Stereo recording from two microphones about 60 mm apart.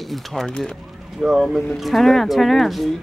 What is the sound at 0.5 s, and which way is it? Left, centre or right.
Speech, centre.